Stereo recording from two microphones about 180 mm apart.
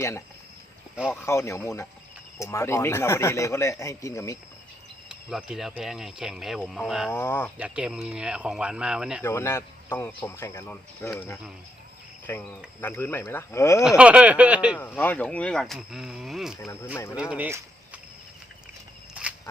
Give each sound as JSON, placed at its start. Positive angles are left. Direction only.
{"t": 0.9, "sound": "speech", "side_deg": -5}
{"t": 1.2, "sound": "speech", "side_deg": 15}
{"t": 5.0, "sound": "speech", "side_deg": -5}
{"t": 7.1, "sound": "speech", "side_deg": 15}
{"t": 7.6, "sound": "speech", "side_deg": -5}
{"t": 9.2, "sound": "speech", "side_deg": 15}
{"t": 13.8, "sound": "speech", "side_deg": -5}
{"t": 14.8, "sound": "speech", "side_deg": 10}
{"t": 16.6, "sound": "speech", "side_deg": 15}
{"t": 17.2, "sound": "speech", "side_deg": -5}